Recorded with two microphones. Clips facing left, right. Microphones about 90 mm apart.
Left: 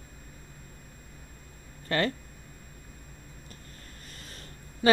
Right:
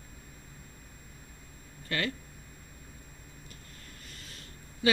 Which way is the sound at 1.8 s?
35° left (ahead or behind).